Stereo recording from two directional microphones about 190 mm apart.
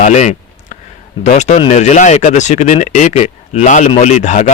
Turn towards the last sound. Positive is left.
turn(degrees=40)  # may be behind; listen again after turning